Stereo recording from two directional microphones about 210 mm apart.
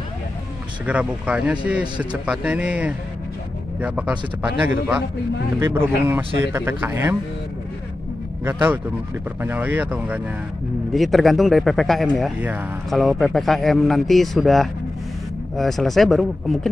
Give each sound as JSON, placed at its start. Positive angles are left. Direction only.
{"t": 0.8, "sound": "speech", "side_deg": -5}
{"t": 5.6, "sound": "speech", "side_deg": -10}
{"t": 8.5, "sound": "speech", "side_deg": -10}